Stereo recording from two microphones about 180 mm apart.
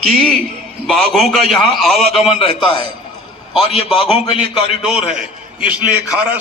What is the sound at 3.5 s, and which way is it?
A man's voice, centre (ahead or behind).